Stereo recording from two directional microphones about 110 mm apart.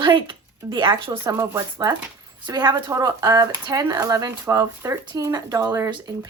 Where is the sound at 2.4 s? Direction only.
40° right (ahead or behind).